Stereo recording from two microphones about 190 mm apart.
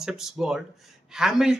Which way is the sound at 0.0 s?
5° right (ahead or behind).